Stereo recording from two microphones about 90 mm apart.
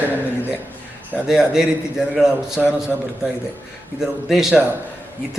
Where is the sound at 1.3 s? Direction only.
5° right (ahead or behind).